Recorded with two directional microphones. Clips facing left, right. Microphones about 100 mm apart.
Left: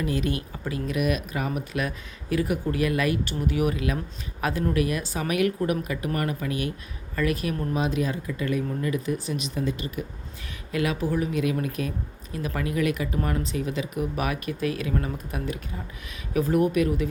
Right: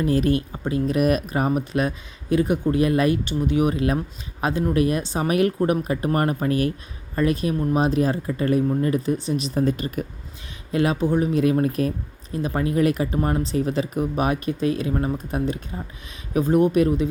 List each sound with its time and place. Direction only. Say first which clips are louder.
0.0 s speech: right 7 dB; 40° right (ahead or behind)
0.5 s speech: right 7 dB; 25° right (ahead or behind)
0.9 s speech: right 5 dB; 40° right (ahead or behind)
7.2 s speech: right 5 dB; 30° right (ahead or behind); by 10.0 s 45° right (ahead or behind)
10.7 s speech: right 5 dB; 30° right (ahead or behind)